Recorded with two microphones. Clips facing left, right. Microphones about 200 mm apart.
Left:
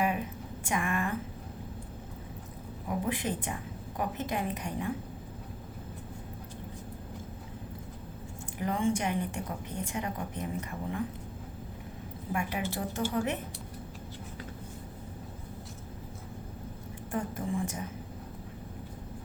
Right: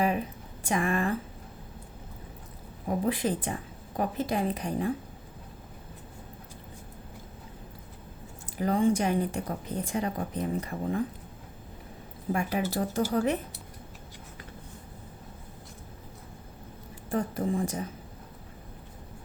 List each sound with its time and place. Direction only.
0.6 s speech: 35° right (ahead or behind)
2.8 s a woman's voice: 35° right (ahead or behind)
8.5 s a woman's voice: 35° right (ahead or behind)
12.3 s a woman's voice: 35° right (ahead or behind)
17.1 s a woman's voice: 35° right (ahead or behind)